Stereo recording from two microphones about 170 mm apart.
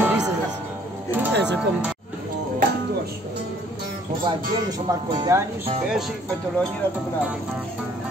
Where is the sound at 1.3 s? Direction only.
90° right.